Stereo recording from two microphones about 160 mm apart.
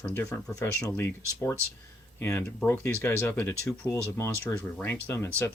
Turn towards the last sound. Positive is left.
turn(degrees=15)  # may be behind; listen again after turning